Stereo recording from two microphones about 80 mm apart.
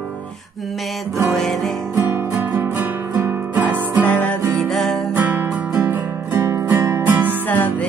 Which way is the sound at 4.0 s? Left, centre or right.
Centre.